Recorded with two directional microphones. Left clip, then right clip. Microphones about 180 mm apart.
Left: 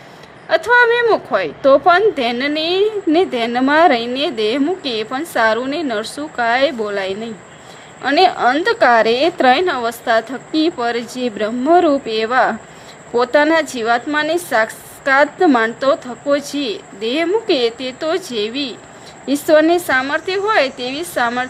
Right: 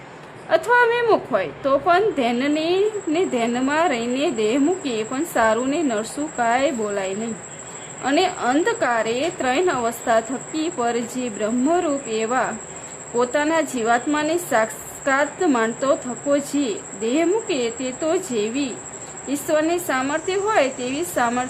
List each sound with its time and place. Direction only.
0.4 s speech: 35° left (ahead or behind)